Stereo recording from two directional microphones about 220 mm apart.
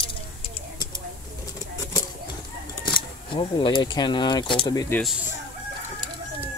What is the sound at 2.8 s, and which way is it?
Speech, 20° left (ahead or behind).